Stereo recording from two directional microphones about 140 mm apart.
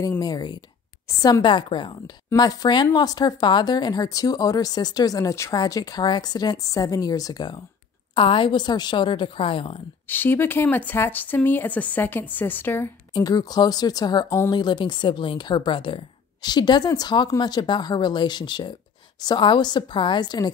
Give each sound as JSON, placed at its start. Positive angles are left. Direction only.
{"t": 0.2, "sound": "speech", "side_deg": 30}
{"t": 10.0, "sound": "speech", "side_deg": 15}
{"t": 13.1, "sound": "speech", "side_deg": 25}